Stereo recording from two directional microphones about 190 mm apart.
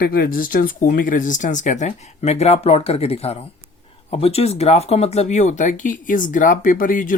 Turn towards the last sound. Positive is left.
turn(degrees=45)  # may be behind; listen again after turning